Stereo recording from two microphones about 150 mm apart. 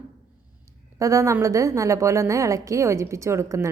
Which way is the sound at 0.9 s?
20° right (ahead or behind).